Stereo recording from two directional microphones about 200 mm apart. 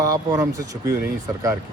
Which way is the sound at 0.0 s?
15° right (ahead or behind).